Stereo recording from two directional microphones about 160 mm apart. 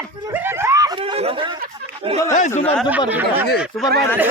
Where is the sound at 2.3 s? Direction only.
50° left (ahead or behind).